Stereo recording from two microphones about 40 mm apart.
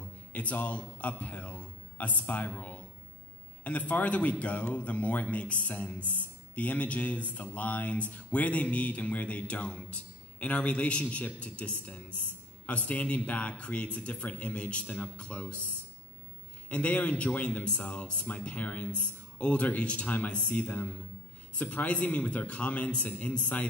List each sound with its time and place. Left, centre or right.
0.3 s a man's voice: left
3.6 s speech: left
16.6 s speech: left